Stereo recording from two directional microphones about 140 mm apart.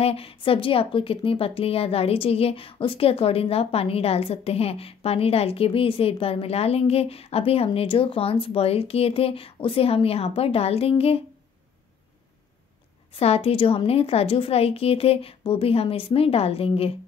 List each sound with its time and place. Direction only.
0.0 s a woman's voice: 45° left (ahead or behind)
13.1 s a woman's voice: 45° left (ahead or behind)